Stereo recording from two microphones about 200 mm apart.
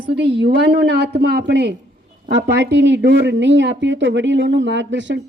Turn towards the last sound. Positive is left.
turn(degrees=-65)  # may be behind; listen again after turning